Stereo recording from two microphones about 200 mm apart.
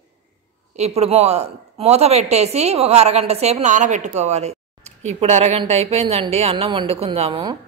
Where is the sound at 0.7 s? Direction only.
35° right (ahead or behind).